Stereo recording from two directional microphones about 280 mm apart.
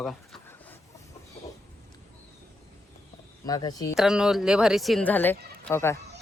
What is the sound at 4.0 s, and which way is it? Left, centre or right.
A man's voice, centre.